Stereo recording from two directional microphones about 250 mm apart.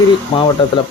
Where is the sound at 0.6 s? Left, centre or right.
Centre.